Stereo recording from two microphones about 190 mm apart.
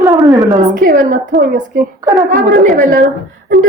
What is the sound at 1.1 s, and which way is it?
A woman's voice, 50° right (ahead or behind).